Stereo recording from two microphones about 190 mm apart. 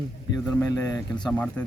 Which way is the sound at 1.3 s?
5° left (ahead or behind).